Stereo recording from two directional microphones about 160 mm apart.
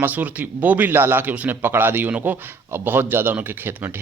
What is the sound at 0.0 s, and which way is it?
Speech, 10° right (ahead or behind).